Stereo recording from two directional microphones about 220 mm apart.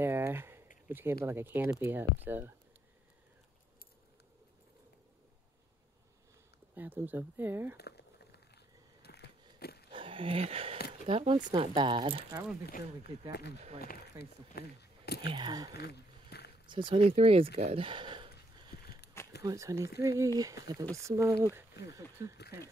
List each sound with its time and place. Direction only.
0.0 s a sound: 10° right (ahead or behind)
0.8 s speech: 10° right (ahead or behind)
6.7 s speech: 10° right (ahead or behind)
7.7 s crumpling: 50° left (ahead or behind)
9.0 s a sound: 45° left (ahead or behind)
9.8 s a sound: 25° right (ahead or behind)
11.1 s speech: 25° right (ahead or behind)
12.6 s speech: 45° left (ahead or behind)
14.5 s speech: 45° left (ahead or behind)
15.2 s speech: 20° right (ahead or behind)
15.7 s a sound: 45° left (ahead or behind)
16.6 s speech: 20° right (ahead or behind)
19.4 s speech: 15° right (ahead or behind)